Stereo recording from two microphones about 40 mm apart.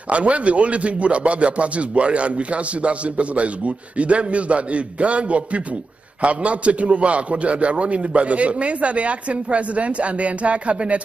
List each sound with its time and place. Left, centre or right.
0.1 s a man's voice: right